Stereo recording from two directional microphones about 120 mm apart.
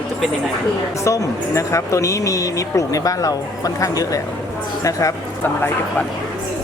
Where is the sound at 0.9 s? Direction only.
25° left (ahead or behind).